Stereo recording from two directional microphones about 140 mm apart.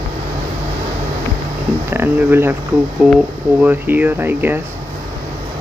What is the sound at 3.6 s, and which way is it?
Speech, 15° right (ahead or behind).